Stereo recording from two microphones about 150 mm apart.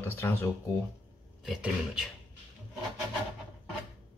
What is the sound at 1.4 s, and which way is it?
Speech, 5° right (ahead or behind).